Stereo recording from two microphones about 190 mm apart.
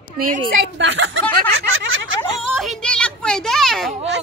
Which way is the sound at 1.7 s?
90° right.